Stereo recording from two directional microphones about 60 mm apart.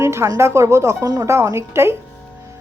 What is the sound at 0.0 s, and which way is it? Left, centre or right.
Music, right.